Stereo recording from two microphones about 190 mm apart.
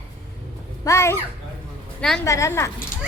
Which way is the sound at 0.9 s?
15° left (ahead or behind).